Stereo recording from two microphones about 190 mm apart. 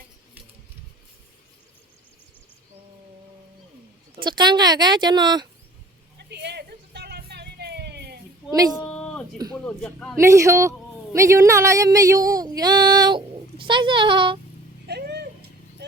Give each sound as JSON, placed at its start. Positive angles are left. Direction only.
{"t": 4.1, "sound": "a woman's voice", "side_deg": -25}
{"t": 6.1, "sound": "a sound", "side_deg": -60}
{"t": 8.8, "sound": "music", "side_deg": 5}
{"t": 9.6, "sound": "a man's voice", "side_deg": 5}
{"t": 10.2, "sound": "a woman's voice", "side_deg": -15}
{"t": 14.8, "sound": "a sound", "side_deg": -60}